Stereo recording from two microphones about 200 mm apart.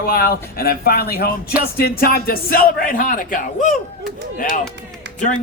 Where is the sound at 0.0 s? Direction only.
50° left (ahead or behind).